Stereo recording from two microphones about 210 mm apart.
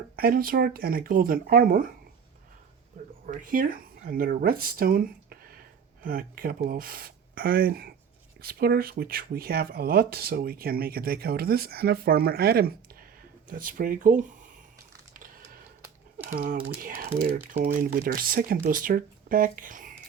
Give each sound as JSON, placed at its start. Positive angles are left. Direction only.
{"t": 0.2, "sound": "speech", "side_deg": -45}
{"t": 3.2, "sound": "speech", "side_deg": -40}
{"t": 15.1, "sound": "a sound", "side_deg": -40}
{"t": 16.3, "sound": "speech", "side_deg": -40}